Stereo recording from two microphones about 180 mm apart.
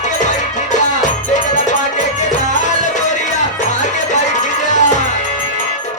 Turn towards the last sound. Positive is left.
turn(degrees=40)  # may be behind; listen again after turning